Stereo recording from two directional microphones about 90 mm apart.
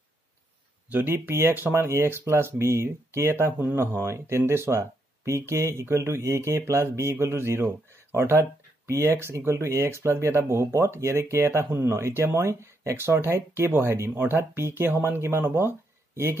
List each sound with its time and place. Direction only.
0.8 s speech: 20° right (ahead or behind)